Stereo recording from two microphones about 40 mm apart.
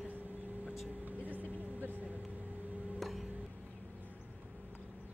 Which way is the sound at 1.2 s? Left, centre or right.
Right.